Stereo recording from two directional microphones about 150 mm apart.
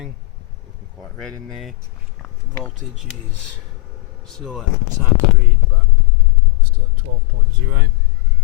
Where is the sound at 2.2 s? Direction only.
10° left (ahead or behind).